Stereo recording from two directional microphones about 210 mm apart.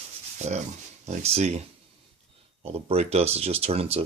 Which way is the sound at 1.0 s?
35° right (ahead or behind).